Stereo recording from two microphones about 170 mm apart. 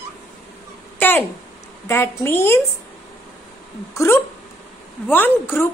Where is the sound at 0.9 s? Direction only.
10° left (ahead or behind).